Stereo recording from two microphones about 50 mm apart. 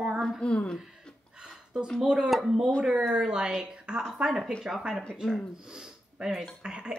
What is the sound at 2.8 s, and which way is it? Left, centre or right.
Speech, centre.